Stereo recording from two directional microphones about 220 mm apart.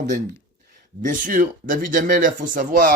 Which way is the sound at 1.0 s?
40° right (ahead or behind).